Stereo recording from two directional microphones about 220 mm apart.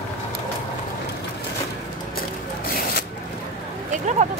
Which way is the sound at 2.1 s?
40° left (ahead or behind).